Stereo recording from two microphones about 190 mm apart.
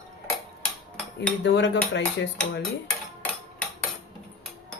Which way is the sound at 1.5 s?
70° left (ahead or behind).